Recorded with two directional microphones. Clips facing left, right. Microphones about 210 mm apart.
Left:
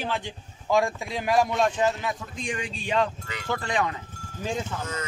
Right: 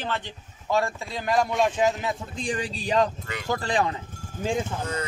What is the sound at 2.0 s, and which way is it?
Speech, 30° right (ahead or behind).